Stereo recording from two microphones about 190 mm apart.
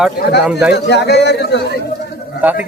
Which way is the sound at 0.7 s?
60° left (ahead or behind).